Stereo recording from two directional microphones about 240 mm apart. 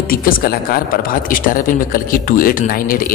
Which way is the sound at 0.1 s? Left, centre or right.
Left.